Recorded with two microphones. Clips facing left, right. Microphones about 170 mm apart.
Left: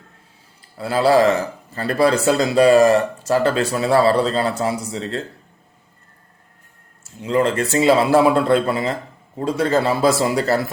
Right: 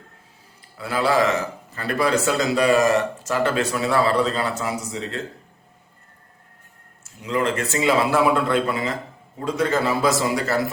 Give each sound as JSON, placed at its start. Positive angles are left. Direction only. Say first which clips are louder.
{"t": 0.8, "sound": "a man's voice", "louder": "left 5 dB", "side_deg": 35}
{"t": 7.0, "sound": "a man's voice", "louder": "left 5 dB", "side_deg": 30}